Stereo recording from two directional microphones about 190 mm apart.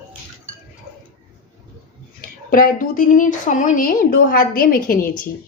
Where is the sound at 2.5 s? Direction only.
45° left (ahead or behind).